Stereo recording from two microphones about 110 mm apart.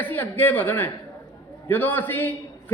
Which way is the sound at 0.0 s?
15° left (ahead or behind).